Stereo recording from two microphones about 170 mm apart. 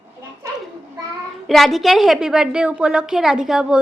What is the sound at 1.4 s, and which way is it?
A woman's voice, centre (ahead or behind).